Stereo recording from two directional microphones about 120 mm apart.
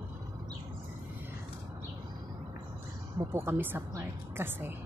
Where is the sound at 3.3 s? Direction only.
20° right (ahead or behind).